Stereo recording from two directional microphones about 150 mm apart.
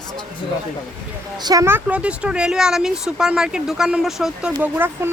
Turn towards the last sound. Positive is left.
turn(degrees=-10)  # may be behind; listen again after turning